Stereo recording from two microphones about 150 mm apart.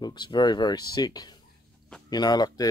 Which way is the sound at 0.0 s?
30° left (ahead or behind).